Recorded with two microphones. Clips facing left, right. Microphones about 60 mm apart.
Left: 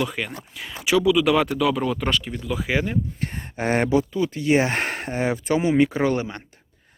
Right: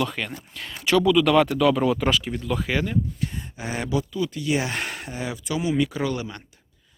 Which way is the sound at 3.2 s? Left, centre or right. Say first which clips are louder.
Left 4 dB; left.